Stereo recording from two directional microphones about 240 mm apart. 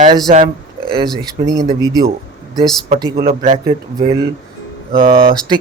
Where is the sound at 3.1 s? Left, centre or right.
Right.